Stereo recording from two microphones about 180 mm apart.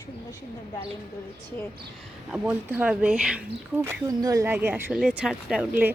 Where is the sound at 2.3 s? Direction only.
10° right (ahead or behind).